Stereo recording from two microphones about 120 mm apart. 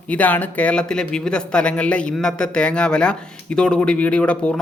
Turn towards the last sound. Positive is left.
turn(degrees=10)  # may be behind; listen again after turning